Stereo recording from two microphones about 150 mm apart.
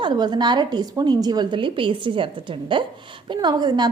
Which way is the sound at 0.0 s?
30° right (ahead or behind).